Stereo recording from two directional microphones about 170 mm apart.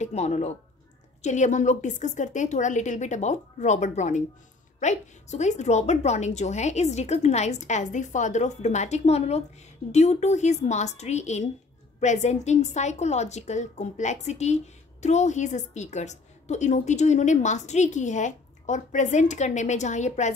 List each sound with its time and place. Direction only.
0.0 s a woman's voice: 40° left (ahead or behind)